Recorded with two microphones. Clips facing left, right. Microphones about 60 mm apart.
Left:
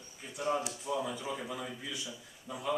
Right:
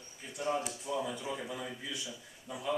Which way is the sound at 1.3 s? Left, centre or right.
Centre.